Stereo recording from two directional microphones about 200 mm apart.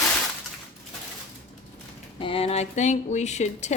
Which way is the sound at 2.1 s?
25° left (ahead or behind).